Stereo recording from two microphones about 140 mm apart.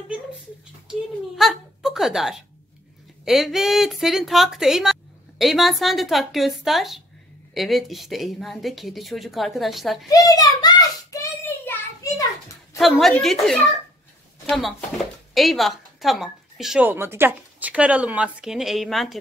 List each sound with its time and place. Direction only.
0.8 s a sound: centre (ahead or behind)
3.3 s a woman's voice: centre (ahead or behind)
10.0 s a sound: 25° left (ahead or behind)
12.7 s a woman's voice: centre (ahead or behind)
15.3 s speech: centre (ahead or behind)
16.9 s speech: 15° right (ahead or behind); by 19.1 s centre (ahead or behind)